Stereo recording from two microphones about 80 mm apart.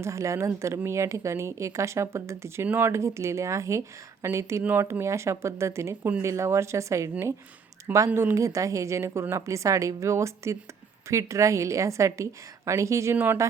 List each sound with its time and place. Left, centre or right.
0.0 s speech: right
2.6 s speech: right
2.9 s speech: right